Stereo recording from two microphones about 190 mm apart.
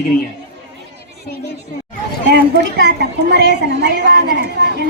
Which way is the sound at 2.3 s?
60° right (ahead or behind).